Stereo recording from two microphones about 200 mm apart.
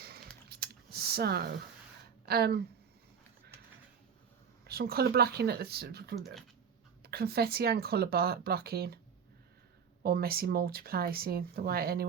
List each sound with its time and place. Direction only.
0.4 s typing: 50° right (ahead or behind)
2.2 s speech: 50° right (ahead or behind)
4.6 s speech: 50° right (ahead or behind)
10.0 s speech: 50° right (ahead or behind)